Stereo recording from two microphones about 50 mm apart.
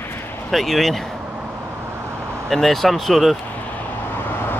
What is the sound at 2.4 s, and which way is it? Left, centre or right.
Speech, centre.